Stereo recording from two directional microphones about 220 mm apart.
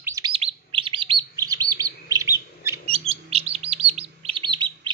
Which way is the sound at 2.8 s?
25° right (ahead or behind).